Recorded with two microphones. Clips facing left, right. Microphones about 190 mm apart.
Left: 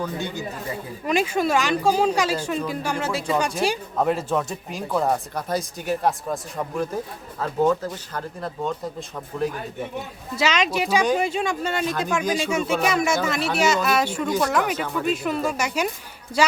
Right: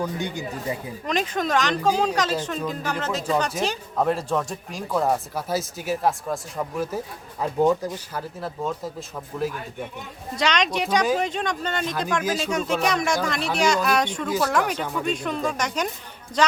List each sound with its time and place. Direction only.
0.0 s speech: 15° right (ahead or behind)
1.0 s speech: 10° left (ahead or behind)
7.3 s speech: 15° right (ahead or behind)
10.3 s speech: 5° left (ahead or behind)
12.2 s speech: 5° right (ahead or behind)
12.5 s speech: 5° left (ahead or behind)
14.3 s speech: 5° right (ahead or behind)